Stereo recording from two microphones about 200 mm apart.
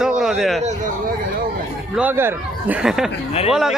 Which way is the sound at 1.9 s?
10° right (ahead or behind).